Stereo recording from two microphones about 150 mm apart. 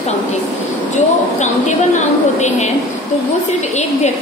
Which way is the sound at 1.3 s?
50° left (ahead or behind).